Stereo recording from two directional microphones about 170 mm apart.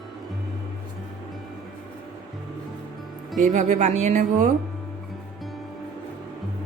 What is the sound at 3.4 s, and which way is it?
Speech, 45° right (ahead or behind).